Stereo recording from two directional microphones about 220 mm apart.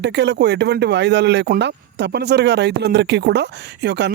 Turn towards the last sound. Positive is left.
turn(degrees=-50)  # may be behind; listen again after turning